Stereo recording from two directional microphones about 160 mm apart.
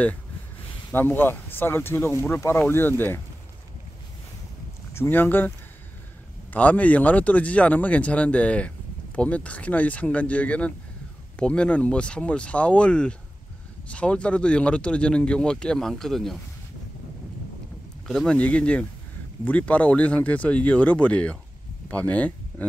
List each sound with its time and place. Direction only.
0.9 s speech: 10° left (ahead or behind)
4.9 s speech: 15° left (ahead or behind)
6.5 s speech: 10° left (ahead or behind)
18.0 s speech: 5° left (ahead or behind)